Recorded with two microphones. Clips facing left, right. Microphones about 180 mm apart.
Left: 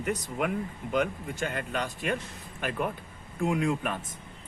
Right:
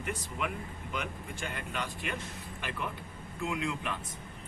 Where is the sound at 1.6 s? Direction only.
45° left (ahead or behind).